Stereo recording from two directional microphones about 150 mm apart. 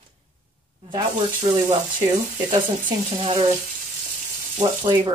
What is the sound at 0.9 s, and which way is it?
Speech, 30° right (ahead or behind).